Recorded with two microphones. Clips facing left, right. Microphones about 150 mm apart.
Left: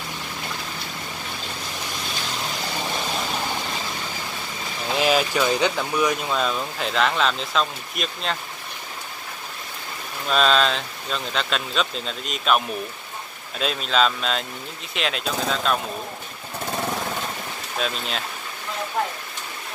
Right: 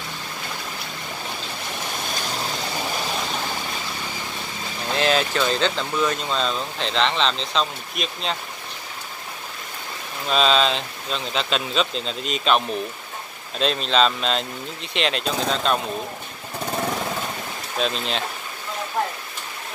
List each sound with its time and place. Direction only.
4.8 s speech: 5° left (ahead or behind)
10.2 s speech: centre (ahead or behind)
17.7 s speech: 5° left (ahead or behind)